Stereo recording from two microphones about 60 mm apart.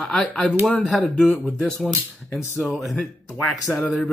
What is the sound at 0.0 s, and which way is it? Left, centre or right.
Speech, centre.